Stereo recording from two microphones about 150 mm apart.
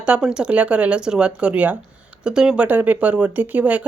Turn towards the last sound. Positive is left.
turn(degrees=-10)  # may be behind; listen again after turning